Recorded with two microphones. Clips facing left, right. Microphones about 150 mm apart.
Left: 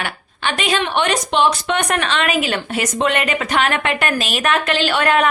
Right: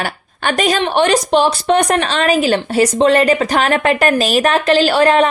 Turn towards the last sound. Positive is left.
turn(degrees=-35)  # may be behind; listen again after turning